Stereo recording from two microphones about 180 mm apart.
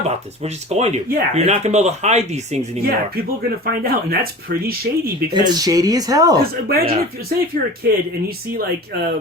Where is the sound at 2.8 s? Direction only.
55° right (ahead or behind).